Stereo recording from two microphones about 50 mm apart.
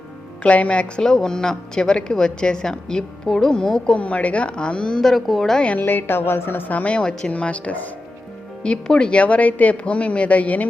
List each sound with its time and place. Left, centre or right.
0.4 s speech: left
1.0 s a woman's voice: centre
3.9 s speech: left
4.9 s speech: centre
5.8 s a woman's voice: left
6.7 s a woman's voice: left
7.0 s speech: centre
8.6 s speech: centre